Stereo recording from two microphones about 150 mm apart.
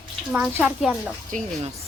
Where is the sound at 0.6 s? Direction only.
5° right (ahead or behind).